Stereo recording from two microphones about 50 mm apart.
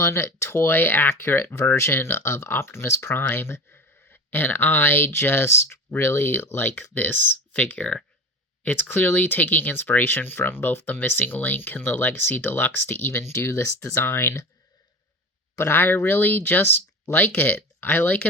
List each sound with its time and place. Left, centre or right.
0.0 s speech: left
1.9 s speech: left
6.9 s speech: left
15.5 s speech: left